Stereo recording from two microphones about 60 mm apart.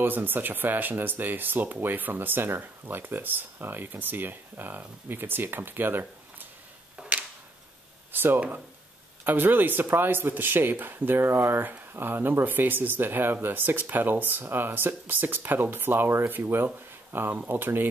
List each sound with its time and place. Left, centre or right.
0.0 s speech: right
7.0 s a sound: right
8.1 s speech: right